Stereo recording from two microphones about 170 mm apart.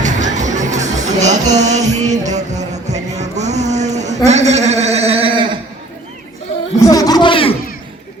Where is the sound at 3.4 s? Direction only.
40° right (ahead or behind).